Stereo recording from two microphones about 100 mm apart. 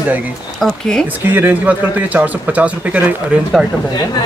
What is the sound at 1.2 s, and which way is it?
A man's voice, 20° right (ahead or behind).